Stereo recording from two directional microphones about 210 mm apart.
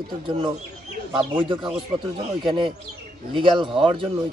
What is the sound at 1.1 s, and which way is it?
A man's voice, 20° right (ahead or behind).